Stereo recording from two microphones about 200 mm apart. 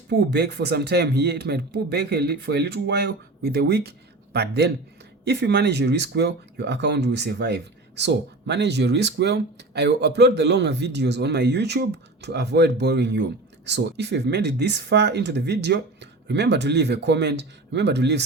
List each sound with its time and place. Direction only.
0.1 s speech: 55° right (ahead or behind)